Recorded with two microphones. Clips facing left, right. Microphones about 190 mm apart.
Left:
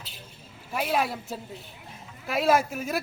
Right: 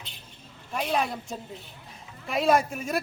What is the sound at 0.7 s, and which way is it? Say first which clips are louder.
Speech: left 1 dB; 5° left (ahead or behind).